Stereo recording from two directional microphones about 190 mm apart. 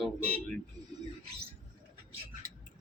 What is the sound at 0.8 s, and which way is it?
Speech, 20° right (ahead or behind).